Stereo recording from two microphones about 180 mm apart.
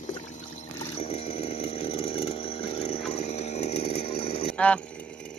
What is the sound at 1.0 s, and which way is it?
Chainsaw, 35° left (ahead or behind).